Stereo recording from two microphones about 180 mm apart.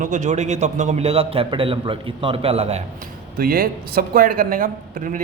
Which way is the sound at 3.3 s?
55° right (ahead or behind).